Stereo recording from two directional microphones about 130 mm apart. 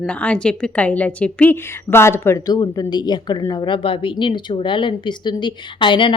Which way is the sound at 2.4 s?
30° left (ahead or behind).